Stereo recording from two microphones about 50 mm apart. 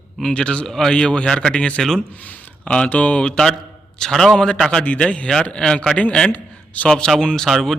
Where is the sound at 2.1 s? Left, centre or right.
Left.